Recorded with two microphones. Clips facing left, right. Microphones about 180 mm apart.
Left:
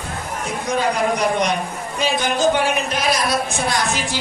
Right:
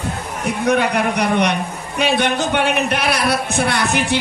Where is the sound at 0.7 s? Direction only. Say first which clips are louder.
Right 2 dB; 65° right (ahead or behind).